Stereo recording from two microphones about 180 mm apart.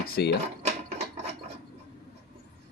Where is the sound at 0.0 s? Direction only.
65° left (ahead or behind).